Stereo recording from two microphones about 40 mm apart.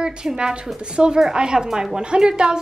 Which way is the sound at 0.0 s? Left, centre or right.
Centre.